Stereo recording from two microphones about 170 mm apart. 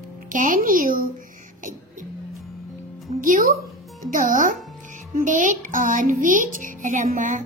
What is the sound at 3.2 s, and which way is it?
Speech, 50° right (ahead or behind).